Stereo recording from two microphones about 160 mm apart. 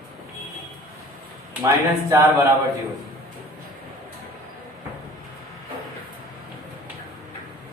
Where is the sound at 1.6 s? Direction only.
20° right (ahead or behind).